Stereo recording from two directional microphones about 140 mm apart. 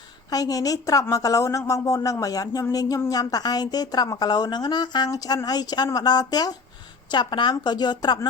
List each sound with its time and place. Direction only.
0.3 s a woman's voice: 25° left (ahead or behind)